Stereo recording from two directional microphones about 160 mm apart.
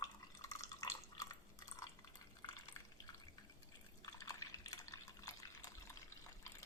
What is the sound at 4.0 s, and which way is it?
Drip, 20° left (ahead or behind).